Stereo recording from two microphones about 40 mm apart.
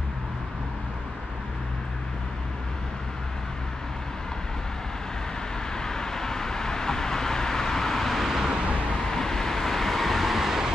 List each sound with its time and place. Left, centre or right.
5.8 s vehicle: centre
8.9 s vehicle: centre